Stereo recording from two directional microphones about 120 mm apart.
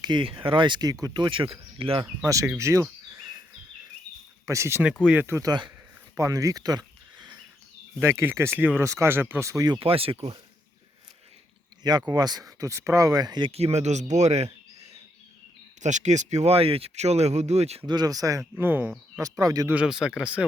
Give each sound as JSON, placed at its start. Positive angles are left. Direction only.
{"t": 0.0, "sound": "speech", "side_deg": -40}
{"t": 2.2, "sound": "speech", "side_deg": -25}
{"t": 4.4, "sound": "speech", "side_deg": -25}
{"t": 5.5, "sound": "speech", "side_deg": -40}
{"t": 6.1, "sound": "a sound", "side_deg": -25}
{"t": 8.0, "sound": "speech", "side_deg": -20}
{"t": 9.7, "sound": "speech", "side_deg": -50}
{"t": 11.8, "sound": "speech", "side_deg": -35}
{"t": 13.5, "sound": "speech", "side_deg": -60}
{"t": 15.8, "sound": "speech", "side_deg": -85}
{"t": 17.8, "sound": "speech", "side_deg": -35}
{"t": 18.6, "sound": "speech", "side_deg": -15}
{"t": 19.2, "sound": "speech", "side_deg": -30}
{"t": 19.6, "sound": "speech", "side_deg": -10}